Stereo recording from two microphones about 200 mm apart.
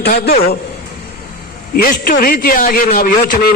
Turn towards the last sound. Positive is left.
turn(degrees=40)  # may be behind; listen again after turning